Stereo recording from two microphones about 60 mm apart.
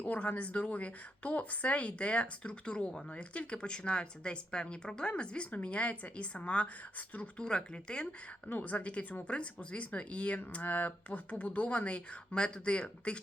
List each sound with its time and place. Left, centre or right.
0.0 s a woman's voice: left